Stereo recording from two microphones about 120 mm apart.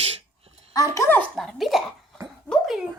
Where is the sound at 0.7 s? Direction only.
25° left (ahead or behind).